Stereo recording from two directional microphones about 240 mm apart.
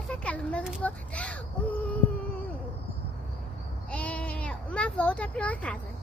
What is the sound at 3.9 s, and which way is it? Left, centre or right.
Sheep, centre.